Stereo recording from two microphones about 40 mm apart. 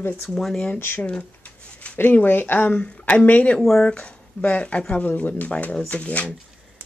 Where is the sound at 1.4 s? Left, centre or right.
Left.